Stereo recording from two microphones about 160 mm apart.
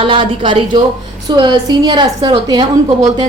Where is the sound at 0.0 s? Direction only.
30° right (ahead or behind).